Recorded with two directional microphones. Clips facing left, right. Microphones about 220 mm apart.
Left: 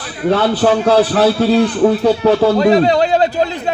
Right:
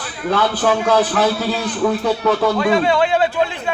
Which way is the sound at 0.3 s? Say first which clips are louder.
Left 5 dB; 35° left (ahead or behind).